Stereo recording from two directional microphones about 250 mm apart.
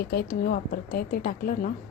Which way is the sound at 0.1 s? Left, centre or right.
Left.